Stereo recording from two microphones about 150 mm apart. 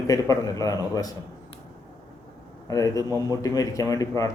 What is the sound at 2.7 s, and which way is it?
A man's voice, 25° left (ahead or behind).